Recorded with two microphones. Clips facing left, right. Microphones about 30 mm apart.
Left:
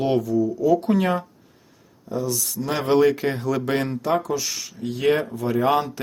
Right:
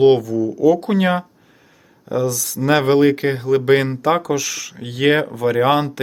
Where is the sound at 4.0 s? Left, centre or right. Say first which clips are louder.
Right 5 dB; right.